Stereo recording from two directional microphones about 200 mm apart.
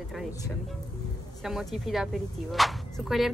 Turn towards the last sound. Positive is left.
turn(degrees=0)  # may be behind; listen again after turning